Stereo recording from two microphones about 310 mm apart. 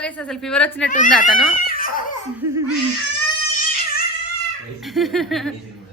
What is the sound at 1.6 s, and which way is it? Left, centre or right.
Baby laughter, left.